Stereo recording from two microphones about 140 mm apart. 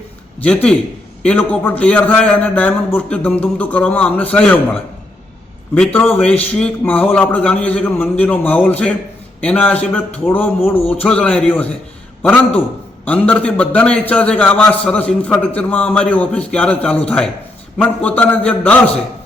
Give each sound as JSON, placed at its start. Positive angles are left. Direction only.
{"t": 0.3, "sound": "a man's voice", "side_deg": 10}